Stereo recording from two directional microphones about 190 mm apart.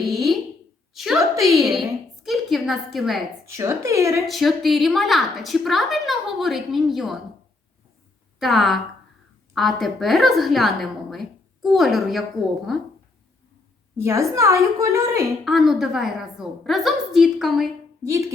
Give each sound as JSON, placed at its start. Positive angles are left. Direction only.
{"t": 0.0, "sound": "a sound", "side_deg": 0}
{"t": 0.9, "sound": "a woman's voice", "side_deg": 0}
{"t": 3.5, "sound": "a woman's voice", "side_deg": -15}
{"t": 4.3, "sound": "a woman's voice", "side_deg": 0}
{"t": 8.4, "sound": "a woman's voice", "side_deg": 0}
{"t": 13.9, "sound": "a woman's voice", "side_deg": -15}
{"t": 15.4, "sound": "a woman's voice", "side_deg": 0}
{"t": 18.0, "sound": "a woman's voice", "side_deg": -15}